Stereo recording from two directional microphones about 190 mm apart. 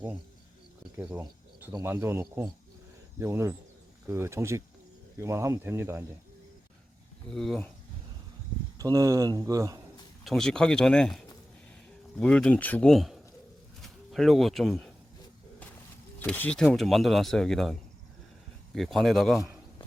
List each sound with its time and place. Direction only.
0.9 s speech: 10° right (ahead or behind)
7.3 s speech: centre (ahead or behind)
8.8 s speech: 20° right (ahead or behind)
10.2 s speech: centre (ahead or behind)
16.2 s speech: 5° left (ahead or behind)